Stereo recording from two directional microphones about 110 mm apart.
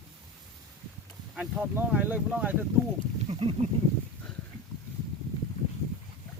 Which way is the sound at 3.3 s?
55° right (ahead or behind).